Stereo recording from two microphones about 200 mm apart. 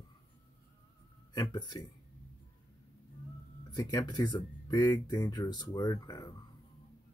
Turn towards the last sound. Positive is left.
turn(degrees=20)  # may be behind; listen again after turning